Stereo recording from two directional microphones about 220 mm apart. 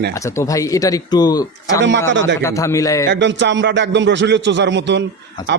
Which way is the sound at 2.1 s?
55° right (ahead or behind).